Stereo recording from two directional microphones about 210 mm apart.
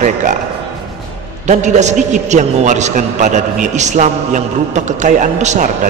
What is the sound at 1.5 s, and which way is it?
A man's voice, 35° right (ahead or behind).